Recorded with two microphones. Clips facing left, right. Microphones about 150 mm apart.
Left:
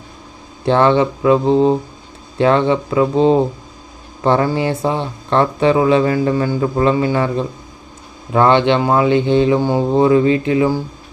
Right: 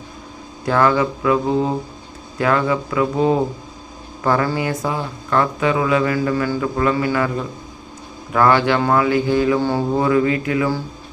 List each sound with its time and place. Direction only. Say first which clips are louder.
0.6 s speech: left 4 dB; 25° left (ahead or behind)